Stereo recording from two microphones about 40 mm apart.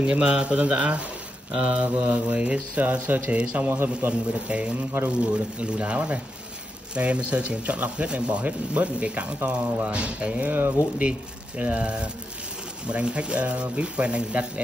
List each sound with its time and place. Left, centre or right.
0.0 s speech: right
3.3 s a man's voice: right
4.1 s speech: right